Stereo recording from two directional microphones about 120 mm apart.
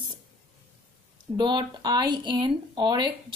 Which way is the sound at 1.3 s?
40° right (ahead or behind).